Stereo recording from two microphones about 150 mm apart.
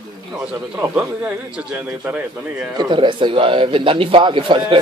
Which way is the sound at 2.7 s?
30° right (ahead or behind).